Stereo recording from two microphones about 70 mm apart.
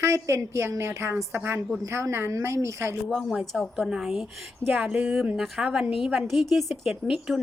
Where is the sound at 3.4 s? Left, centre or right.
Centre.